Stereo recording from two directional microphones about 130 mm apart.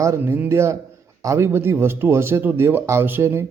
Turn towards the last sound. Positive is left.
turn(degrees=-20)  # may be behind; listen again after turning